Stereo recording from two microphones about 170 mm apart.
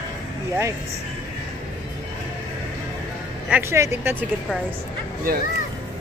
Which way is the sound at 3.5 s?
15° right (ahead or behind).